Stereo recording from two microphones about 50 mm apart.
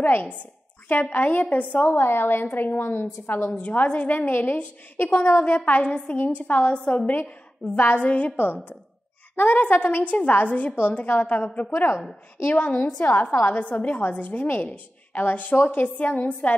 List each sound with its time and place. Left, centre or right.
0.0 s a woman's voice: left
2.0 s a woman's voice: left
3.5 s a woman's voice: left
6.8 s a woman's voice: centre
7.1 s a woman's voice: left
9.3 s a woman's voice: left